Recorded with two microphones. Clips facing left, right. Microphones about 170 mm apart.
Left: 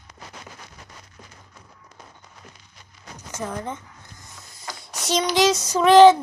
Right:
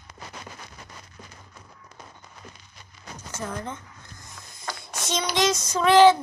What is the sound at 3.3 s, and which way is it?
Speech, 15° left (ahead or behind).